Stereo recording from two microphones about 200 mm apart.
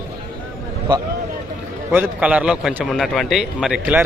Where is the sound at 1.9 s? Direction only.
10° right (ahead or behind).